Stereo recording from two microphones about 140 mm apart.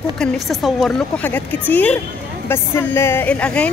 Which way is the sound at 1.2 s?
10° left (ahead or behind).